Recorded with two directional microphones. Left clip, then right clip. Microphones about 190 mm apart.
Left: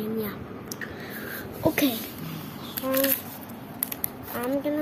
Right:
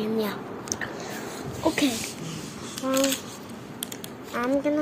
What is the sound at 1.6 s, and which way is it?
Babbling, 15° left (ahead or behind).